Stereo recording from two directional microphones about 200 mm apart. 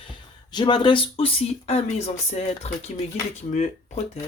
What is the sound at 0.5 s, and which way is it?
Speech, 20° left (ahead or behind).